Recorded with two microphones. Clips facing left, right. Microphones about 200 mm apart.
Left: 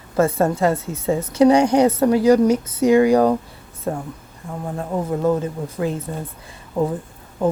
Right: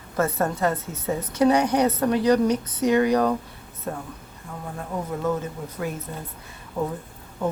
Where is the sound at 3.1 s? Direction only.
35° left (ahead or behind).